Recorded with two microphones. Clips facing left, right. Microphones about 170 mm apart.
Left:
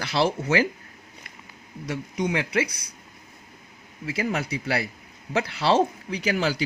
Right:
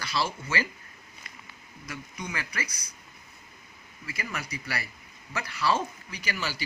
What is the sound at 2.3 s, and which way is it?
Speech, 65° left (ahead or behind).